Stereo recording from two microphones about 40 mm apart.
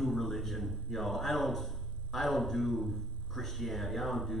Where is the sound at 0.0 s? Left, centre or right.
Centre.